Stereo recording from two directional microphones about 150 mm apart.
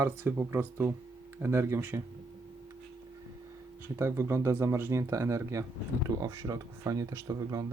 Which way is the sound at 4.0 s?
15° right (ahead or behind).